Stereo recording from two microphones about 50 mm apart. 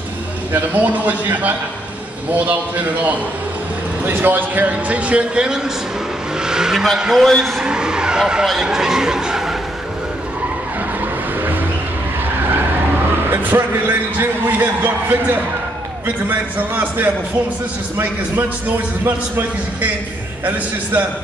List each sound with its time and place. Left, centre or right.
0.7 s a man's voice: right; by 7.6 s centre
7.6 s vehicle: centre
8.6 s speech: centre
13.3 s a man's voice: right
19.0 s a man's voice: right